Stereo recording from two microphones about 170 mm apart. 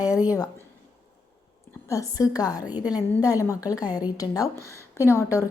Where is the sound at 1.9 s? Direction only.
20° left (ahead or behind).